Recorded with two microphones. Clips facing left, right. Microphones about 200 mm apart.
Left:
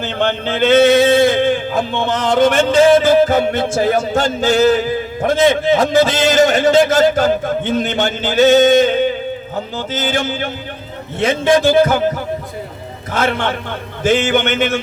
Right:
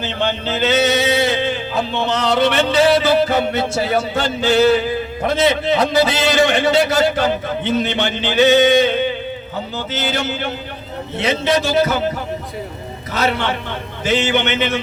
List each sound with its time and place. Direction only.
0.0 s speech: 50° left (ahead or behind)